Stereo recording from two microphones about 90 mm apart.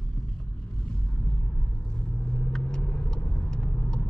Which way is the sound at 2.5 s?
10° left (ahead or behind).